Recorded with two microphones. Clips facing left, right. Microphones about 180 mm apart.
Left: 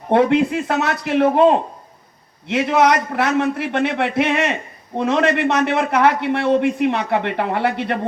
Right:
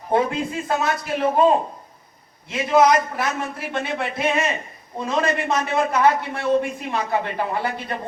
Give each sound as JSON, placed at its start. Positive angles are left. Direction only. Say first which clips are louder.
{"t": 0.1, "sound": "a man's voice", "louder": "left 7 dB", "side_deg": 75}